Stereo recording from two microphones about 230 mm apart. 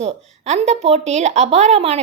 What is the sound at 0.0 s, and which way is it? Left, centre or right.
A woman's voice, right.